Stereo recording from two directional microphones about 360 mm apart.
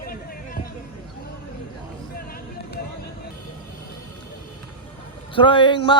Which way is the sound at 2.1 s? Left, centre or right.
Left.